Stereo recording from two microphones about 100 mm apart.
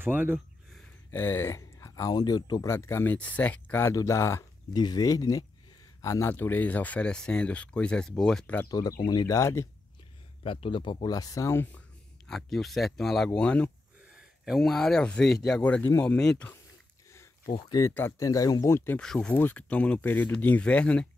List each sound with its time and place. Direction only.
0.0 s speech: 20° right (ahead or behind)
1.1 s speech: 25° left (ahead or behind); by 2.7 s 40° left (ahead or behind)
2.7 s speech: 25° left (ahead or behind)
3.9 s speech: 30° left (ahead or behind)
4.7 s speech: 45° left (ahead or behind); by 8.5 s 5° left (ahead or behind)
8.6 s speech: 40° left (ahead or behind)
10.4 s speech: 60° left (ahead or behind)
11.1 s speech: 40° left (ahead or behind); by 11.8 s 25° left (ahead or behind)
12.3 s speech: 5° left (ahead or behind)
14.1 s speech: 5° right (ahead or behind)
17.6 s speech: 45° left (ahead or behind)
17.8 s speech: 25° left (ahead or behind)
18.2 s speech: 35° left (ahead or behind)
18.9 s speech: 10° left (ahead or behind)